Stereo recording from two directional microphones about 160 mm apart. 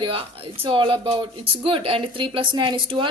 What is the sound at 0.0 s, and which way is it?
Speech, 35° right (ahead or behind).